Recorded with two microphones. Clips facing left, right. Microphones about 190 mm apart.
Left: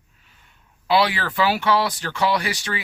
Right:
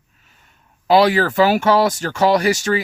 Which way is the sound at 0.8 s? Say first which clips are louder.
Right 7 dB; 45° right (ahead or behind).